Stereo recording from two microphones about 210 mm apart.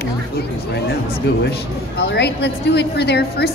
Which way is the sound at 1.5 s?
55° left (ahead or behind).